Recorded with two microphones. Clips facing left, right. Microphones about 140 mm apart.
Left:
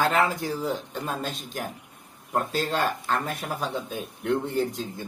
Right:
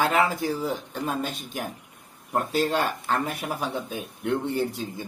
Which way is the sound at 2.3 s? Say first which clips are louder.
Right 2 dB; 5° right (ahead or behind).